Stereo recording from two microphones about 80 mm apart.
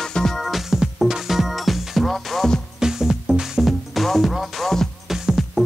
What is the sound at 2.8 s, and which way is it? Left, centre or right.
Music, centre.